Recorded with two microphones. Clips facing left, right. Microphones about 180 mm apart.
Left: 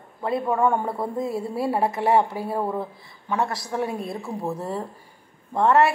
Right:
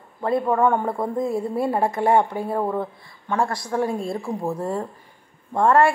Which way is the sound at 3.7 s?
30° right (ahead or behind).